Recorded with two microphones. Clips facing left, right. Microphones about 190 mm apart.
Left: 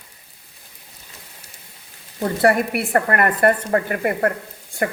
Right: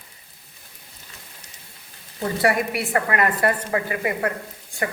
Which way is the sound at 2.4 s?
55° left (ahead or behind).